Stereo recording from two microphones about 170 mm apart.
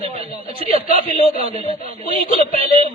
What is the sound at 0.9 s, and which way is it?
Speech, 55° left (ahead or behind).